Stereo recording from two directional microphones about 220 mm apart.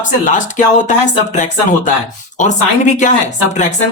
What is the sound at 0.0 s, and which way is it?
Speech, 35° left (ahead or behind).